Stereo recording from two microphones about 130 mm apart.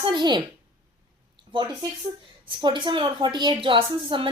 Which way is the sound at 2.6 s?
35° right (ahead or behind).